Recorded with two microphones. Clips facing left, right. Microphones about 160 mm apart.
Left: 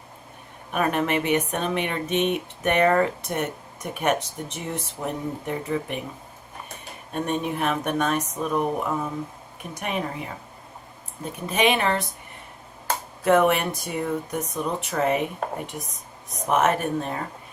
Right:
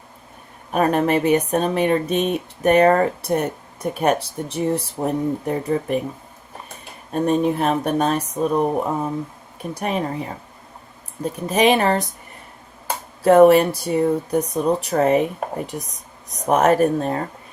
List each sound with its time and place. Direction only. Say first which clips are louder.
0.7 s speech: right 6 dB; 35° right (ahead or behind)
7.1 s speech: right 8 dB; 35° right (ahead or behind)
13.2 s speech: right 8 dB; 35° right (ahead or behind)